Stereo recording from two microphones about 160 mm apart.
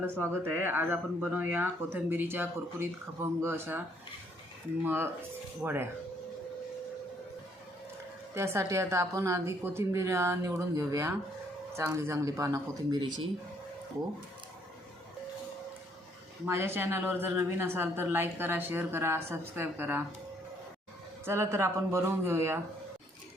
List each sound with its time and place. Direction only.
0.0 s speech: 15° right (ahead or behind)
8.4 s speech: 15° right (ahead or behind)
16.5 s speech: 15° right (ahead or behind)
21.2 s speech: 15° right (ahead or behind)